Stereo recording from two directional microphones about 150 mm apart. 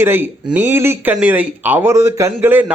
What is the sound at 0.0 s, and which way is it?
A man's voice, 15° right (ahead or behind).